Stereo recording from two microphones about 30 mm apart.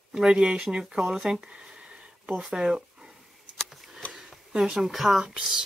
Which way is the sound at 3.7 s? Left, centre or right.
Centre.